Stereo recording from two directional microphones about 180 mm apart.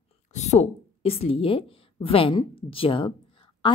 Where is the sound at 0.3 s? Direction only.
40° left (ahead or behind).